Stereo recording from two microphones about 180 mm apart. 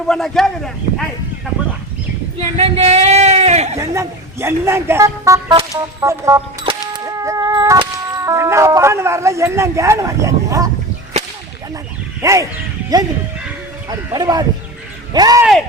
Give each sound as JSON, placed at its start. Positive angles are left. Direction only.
{"t": 0.1, "sound": "speech", "side_deg": 0}
{"t": 2.4, "sound": "speech", "side_deg": -35}
{"t": 3.8, "sound": "speech", "side_deg": -15}
{"t": 6.7, "sound": "music", "side_deg": -20}
{"t": 12.2, "sound": "speech", "side_deg": -15}
{"t": 14.1, "sound": "speech", "side_deg": -20}